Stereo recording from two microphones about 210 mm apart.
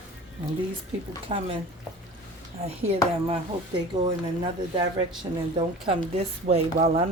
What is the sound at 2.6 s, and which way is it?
Speech, 30° right (ahead or behind).